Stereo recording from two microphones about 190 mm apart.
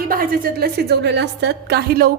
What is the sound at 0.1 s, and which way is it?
A woman's voice, 50° right (ahead or behind).